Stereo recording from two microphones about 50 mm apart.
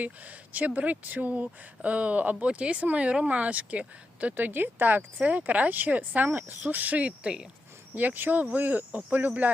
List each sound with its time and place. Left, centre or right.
0.0 s speech: right